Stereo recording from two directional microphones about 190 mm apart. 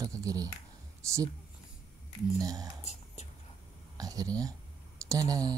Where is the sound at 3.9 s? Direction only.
20° right (ahead or behind).